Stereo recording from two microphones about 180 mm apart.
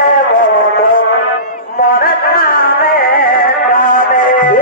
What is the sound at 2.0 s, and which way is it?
Music, 55° left (ahead or behind).